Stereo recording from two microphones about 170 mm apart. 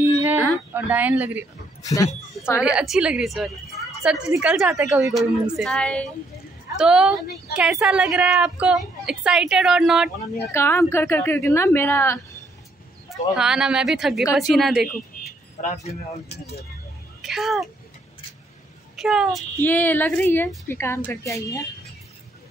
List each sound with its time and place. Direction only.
0.0 s a sound: 15° right (ahead or behind)
0.7 s speech: 10° right (ahead or behind)
1.8 s speech: 20° left (ahead or behind)
2.6 s a woman's voice: 5° right (ahead or behind)
6.8 s a woman's voice: 5° right (ahead or behind)
7.5 s a woman's voice: 70° left (ahead or behind)
7.8 s a woman's voice: 5° right (ahead or behind)
10.5 s a woman's voice: 15° left (ahead or behind)
13.1 s a woman's voice: 5° right (ahead or behind)
15.2 s keys jangling: 55° left (ahead or behind)
15.6 s speech: 40° left (ahead or behind)
17.2 s speech: centre (ahead or behind)
18.9 s a woman's voice: centre (ahead or behind)
19.6 s a woman's voice: 10° left (ahead or behind)